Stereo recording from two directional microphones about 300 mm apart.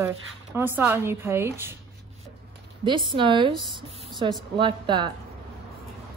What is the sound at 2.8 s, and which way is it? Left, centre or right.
A woman's voice, centre.